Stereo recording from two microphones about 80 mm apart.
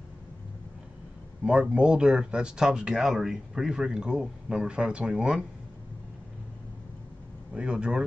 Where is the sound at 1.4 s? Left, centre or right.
Centre.